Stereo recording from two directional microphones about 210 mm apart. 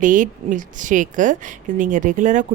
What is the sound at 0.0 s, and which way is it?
A woman's voice, 40° right (ahead or behind).